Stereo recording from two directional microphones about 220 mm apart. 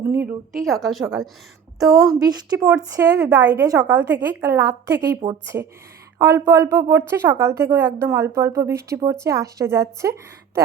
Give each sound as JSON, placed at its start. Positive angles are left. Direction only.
{"t": 0.0, "sound": "a woman's voice", "side_deg": -10}
{"t": 2.1, "sound": "a woman's voice", "side_deg": -15}